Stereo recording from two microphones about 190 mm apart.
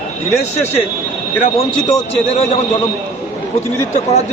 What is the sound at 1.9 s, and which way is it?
Speech, 30° left (ahead or behind).